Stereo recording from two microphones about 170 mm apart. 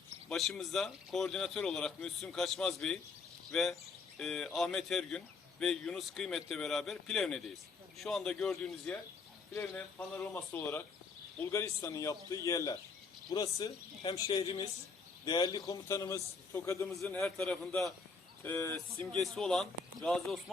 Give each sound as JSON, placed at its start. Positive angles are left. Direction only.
{"t": 0.3, "sound": "a man's voice", "side_deg": 0}
{"t": 17.0, "sound": "speech", "side_deg": 5}
{"t": 18.4, "sound": "a man's voice", "side_deg": 15}
{"t": 19.1, "sound": "speech", "side_deg": 0}